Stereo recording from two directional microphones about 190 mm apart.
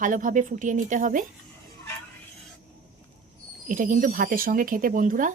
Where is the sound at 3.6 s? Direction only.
45° right (ahead or behind).